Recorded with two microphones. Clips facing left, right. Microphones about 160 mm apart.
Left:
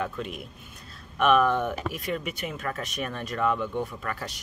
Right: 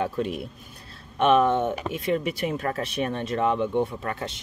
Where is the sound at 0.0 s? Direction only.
35° right (ahead or behind).